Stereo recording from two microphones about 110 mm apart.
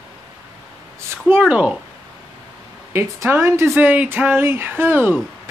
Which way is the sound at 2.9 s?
20° right (ahead or behind).